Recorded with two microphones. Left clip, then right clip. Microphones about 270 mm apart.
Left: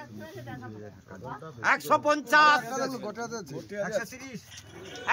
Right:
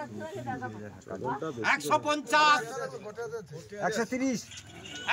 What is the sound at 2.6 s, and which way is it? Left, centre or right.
Speech, left.